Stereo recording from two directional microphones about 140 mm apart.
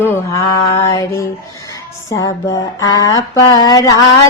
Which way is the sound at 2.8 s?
25° left (ahead or behind).